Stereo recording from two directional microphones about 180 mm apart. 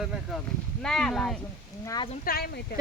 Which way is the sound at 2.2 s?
55° left (ahead or behind).